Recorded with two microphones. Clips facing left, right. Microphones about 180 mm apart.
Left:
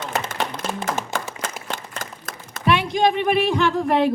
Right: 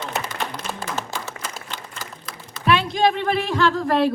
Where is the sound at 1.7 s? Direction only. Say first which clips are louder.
Left 3 dB; 50° left (ahead or behind).